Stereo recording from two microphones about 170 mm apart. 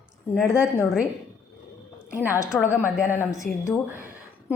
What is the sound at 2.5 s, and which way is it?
Speech, 5° left (ahead or behind).